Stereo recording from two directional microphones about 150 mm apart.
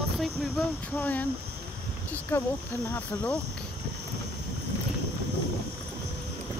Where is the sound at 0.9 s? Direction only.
10° left (ahead or behind).